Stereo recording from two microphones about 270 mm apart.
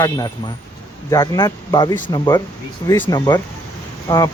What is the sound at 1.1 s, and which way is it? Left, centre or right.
Speech, centre.